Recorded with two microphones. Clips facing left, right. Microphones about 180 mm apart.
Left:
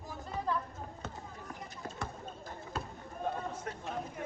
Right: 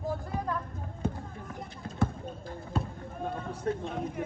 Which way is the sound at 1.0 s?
10° right (ahead or behind).